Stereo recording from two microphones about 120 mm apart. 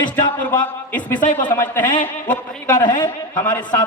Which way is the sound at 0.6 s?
15° left (ahead or behind).